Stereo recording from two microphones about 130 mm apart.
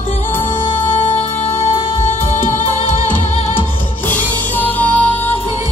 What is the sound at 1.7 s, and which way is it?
Music, 45° left (ahead or behind).